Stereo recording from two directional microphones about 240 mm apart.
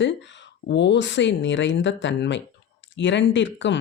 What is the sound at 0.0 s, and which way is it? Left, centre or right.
Speech, left.